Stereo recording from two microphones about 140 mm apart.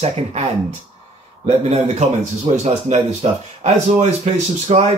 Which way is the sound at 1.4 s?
50° right (ahead or behind).